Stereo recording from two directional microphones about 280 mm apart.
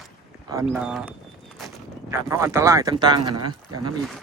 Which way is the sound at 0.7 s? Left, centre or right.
Centre.